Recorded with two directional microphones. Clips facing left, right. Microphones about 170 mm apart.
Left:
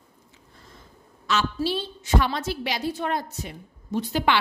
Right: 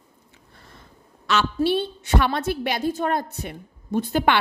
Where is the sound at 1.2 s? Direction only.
65° right (ahead or behind).